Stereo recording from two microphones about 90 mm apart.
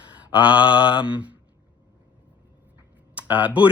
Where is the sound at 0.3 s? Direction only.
65° left (ahead or behind).